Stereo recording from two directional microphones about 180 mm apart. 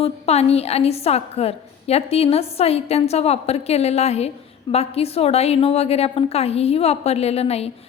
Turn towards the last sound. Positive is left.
turn(degrees=35)  # may be behind; listen again after turning